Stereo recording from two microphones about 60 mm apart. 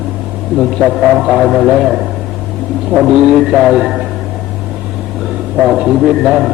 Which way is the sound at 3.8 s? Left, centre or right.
Centre.